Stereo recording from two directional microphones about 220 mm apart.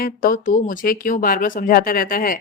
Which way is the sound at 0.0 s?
40° left (ahead or behind).